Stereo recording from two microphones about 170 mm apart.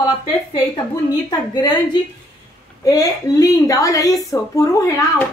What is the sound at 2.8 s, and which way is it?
A woman's voice, 20° left (ahead or behind).